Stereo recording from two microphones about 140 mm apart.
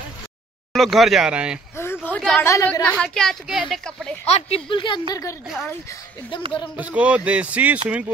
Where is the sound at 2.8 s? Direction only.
5° left (ahead or behind).